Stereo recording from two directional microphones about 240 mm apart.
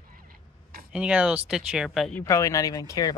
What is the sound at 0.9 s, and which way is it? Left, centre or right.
Speech, centre.